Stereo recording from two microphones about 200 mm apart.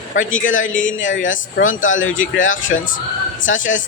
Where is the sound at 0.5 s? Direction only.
75° left (ahead or behind).